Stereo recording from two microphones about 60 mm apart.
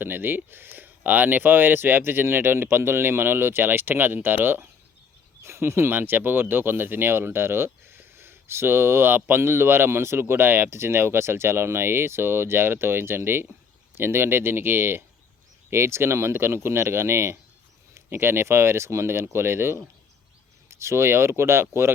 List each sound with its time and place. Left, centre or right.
0.0 s speech: right
5.4 s speech: right
6.0 s speech: right